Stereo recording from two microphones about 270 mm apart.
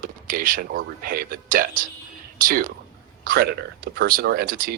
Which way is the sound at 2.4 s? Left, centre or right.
Right.